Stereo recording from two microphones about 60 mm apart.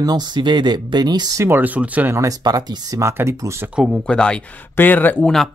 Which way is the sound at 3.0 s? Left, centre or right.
Right.